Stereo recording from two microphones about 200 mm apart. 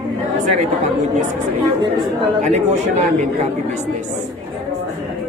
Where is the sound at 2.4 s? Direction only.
35° right (ahead or behind).